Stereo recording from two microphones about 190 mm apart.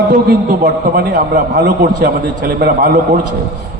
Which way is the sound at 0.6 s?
55° right (ahead or behind).